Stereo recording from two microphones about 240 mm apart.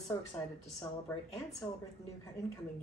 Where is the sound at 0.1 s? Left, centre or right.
Centre.